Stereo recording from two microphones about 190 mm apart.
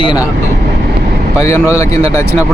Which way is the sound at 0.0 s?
25° left (ahead or behind).